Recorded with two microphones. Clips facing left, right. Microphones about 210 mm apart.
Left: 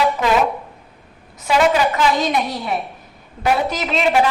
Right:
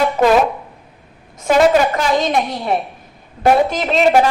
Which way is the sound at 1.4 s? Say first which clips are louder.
Right 4 dB; 45° right (ahead or behind).